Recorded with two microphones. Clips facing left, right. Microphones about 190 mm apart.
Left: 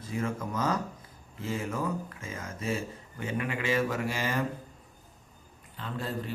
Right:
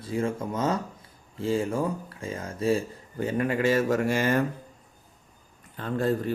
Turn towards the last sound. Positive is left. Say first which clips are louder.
# right 9 dB
turn(degrees=-50)  # may be behind; listen again after turning